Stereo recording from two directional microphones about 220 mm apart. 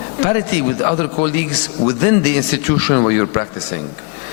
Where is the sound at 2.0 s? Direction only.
15° left (ahead or behind).